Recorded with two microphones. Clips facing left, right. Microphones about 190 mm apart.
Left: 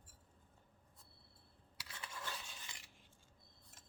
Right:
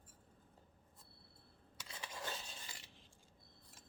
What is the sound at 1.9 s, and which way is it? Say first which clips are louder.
Dishes: right 2 dB; 25° right (ahead or behind).